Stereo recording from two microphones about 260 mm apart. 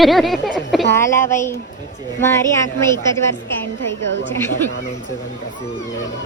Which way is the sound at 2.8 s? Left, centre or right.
Centre.